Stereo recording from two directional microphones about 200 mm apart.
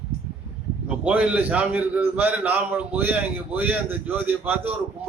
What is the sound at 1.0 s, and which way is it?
A man's voice, 5° right (ahead or behind).